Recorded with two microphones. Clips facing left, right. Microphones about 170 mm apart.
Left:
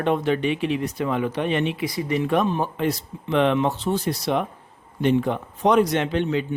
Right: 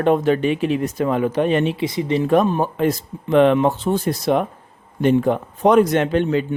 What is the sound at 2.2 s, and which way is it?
Speech, 45° right (ahead or behind).